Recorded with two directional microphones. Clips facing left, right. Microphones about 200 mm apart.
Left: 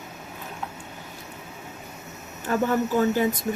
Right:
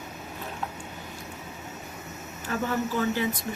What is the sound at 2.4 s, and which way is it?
Speech, 45° left (ahead or behind).